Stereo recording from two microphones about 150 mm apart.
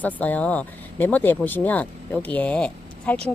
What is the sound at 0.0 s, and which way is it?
A woman's voice, 10° left (ahead or behind).